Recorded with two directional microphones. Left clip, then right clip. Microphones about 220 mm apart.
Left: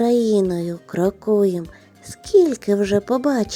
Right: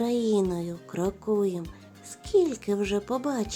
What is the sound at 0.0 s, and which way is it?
A child's voice, 25° left (ahead or behind).